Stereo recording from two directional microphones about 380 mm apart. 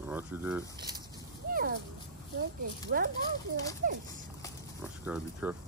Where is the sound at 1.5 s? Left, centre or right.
Right.